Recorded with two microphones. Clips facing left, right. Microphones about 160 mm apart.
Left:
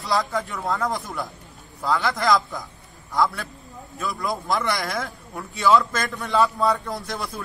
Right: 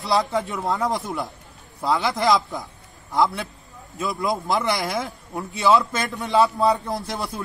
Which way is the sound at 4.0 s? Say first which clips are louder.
Right 3 dB; 20° right (ahead or behind).